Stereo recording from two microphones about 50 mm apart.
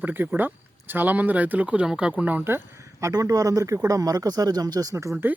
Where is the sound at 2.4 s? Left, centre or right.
Right.